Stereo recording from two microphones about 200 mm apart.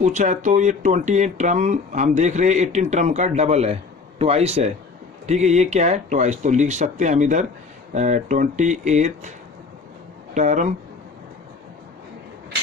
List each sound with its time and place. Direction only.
0.0 s speech: 35° right (ahead or behind)
10.3 s speech: 40° right (ahead or behind)